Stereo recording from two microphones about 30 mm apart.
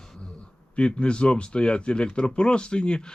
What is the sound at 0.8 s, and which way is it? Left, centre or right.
Speech, left.